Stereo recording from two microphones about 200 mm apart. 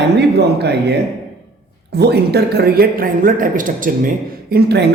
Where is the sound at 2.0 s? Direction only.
55° right (ahead or behind).